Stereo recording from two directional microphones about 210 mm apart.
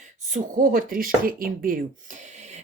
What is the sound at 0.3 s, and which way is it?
A woman's voice, 40° right (ahead or behind).